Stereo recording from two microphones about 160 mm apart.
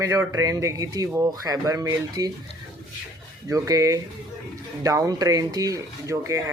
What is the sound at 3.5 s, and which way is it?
Speech, 20° right (ahead or behind).